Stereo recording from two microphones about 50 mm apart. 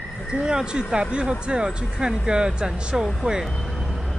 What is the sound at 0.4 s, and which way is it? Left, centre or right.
Speech, centre.